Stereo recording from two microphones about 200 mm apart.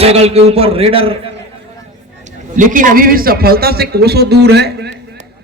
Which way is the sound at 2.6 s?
40° right (ahead or behind).